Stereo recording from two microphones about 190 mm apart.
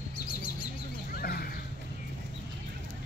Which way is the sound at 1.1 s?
55° left (ahead or behind).